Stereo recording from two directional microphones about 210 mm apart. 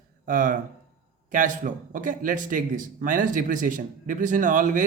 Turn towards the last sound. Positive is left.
turn(degrees=-40)  # may be behind; listen again after turning